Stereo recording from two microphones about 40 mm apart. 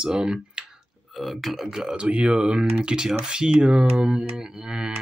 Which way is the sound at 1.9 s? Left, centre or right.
Right.